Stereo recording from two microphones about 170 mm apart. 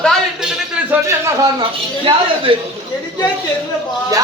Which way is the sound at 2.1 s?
30° right (ahead or behind).